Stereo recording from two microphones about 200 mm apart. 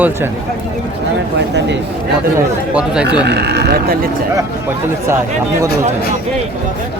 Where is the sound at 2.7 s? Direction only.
5° right (ahead or behind).